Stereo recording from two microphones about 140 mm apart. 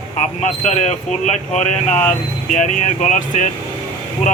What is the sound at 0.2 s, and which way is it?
Speech, 55° left (ahead or behind).